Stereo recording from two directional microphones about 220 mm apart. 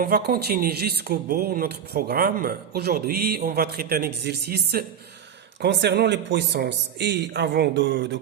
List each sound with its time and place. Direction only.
0.0 s speech: 45° right (ahead or behind)